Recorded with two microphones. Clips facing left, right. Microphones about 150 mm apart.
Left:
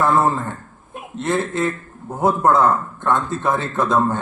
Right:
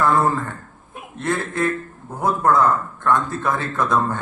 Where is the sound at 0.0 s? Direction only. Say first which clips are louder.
Left 1 dB; 20° left (ahead or behind).